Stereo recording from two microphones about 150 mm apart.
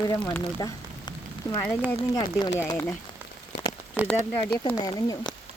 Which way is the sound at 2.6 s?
15° left (ahead or behind).